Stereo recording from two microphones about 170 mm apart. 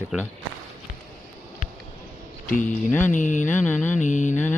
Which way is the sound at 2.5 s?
50° left (ahead or behind).